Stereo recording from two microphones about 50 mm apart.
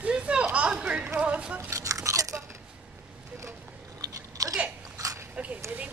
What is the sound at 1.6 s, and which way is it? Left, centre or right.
Chewing, right.